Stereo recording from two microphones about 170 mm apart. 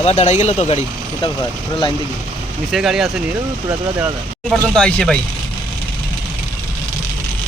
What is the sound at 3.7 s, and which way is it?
Speech, 15° right (ahead or behind).